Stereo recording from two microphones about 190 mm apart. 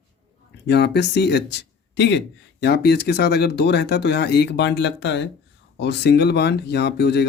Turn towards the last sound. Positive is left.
turn(degrees=60)  # may be behind; listen again after turning